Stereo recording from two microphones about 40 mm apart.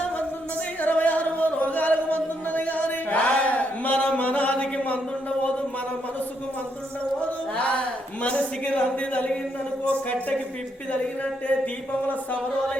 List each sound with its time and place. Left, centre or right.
0.8 s music: left
7.2 s a sound: left
10.9 s speech: left